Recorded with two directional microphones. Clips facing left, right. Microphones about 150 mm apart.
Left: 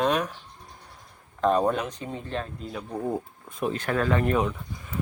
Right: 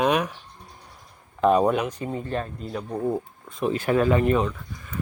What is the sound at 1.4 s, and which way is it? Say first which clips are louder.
Speech: right 3 dB; 5° right (ahead or behind).